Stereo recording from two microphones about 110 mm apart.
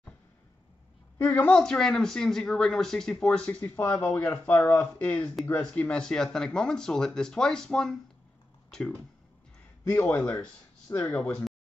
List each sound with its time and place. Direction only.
1.1 s a woman's voice: 15° left (ahead or behind)
1.6 s speech: 5° left (ahead or behind)
8.6 s a sound: 5° left (ahead or behind)
9.8 s speech: 20° left (ahead or behind)